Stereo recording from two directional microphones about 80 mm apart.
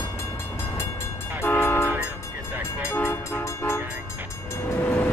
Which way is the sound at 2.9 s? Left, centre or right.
Left.